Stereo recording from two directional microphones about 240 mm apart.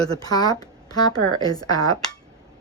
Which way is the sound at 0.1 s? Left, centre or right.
Centre.